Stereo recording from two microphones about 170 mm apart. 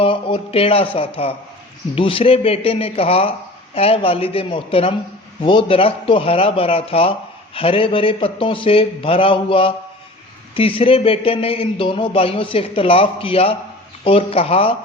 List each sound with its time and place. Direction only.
0.0 s speech: 30° left (ahead or behind)